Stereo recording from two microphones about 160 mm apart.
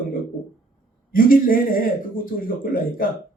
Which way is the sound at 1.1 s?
60° left (ahead or behind).